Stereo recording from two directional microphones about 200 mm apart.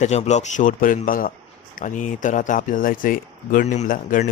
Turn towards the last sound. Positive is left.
turn(degrees=40)  # may be behind; listen again after turning